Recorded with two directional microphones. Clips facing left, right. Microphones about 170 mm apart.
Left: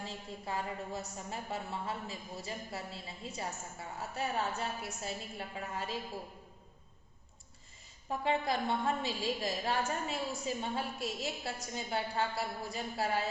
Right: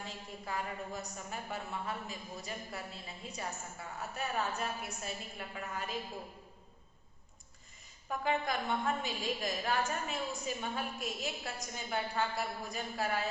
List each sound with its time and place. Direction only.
0.0 s a woman's voice: 25° left (ahead or behind)
8.1 s a woman's voice: 30° left (ahead or behind)